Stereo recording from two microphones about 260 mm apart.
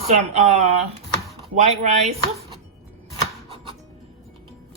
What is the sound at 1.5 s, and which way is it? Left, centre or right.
Speech, right.